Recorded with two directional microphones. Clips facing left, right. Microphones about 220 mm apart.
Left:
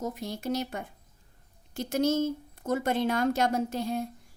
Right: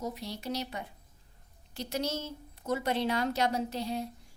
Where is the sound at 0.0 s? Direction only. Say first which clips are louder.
Left 4 dB; 50° left (ahead or behind).